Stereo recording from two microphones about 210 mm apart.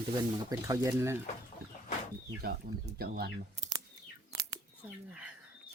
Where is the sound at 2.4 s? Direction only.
45° right (ahead or behind).